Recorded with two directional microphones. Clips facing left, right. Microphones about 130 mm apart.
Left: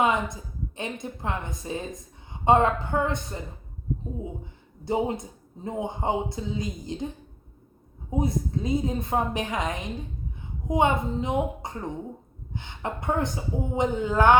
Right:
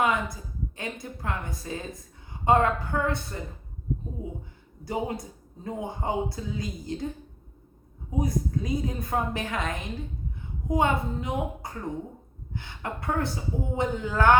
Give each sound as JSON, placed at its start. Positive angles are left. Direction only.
{"t": 0.0, "sound": "a woman's voice", "side_deg": 20}
{"t": 4.9, "sound": "a woman's voice", "side_deg": 25}
{"t": 8.1, "sound": "a woman's voice", "side_deg": 25}